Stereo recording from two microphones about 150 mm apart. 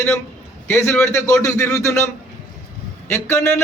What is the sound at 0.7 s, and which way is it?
A man's voice, 20° left (ahead or behind).